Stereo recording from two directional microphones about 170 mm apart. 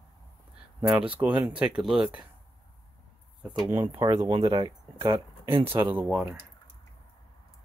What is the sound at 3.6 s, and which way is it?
Speech, 15° right (ahead or behind).